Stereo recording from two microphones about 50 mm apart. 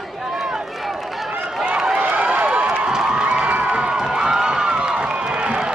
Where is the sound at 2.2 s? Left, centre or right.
Right.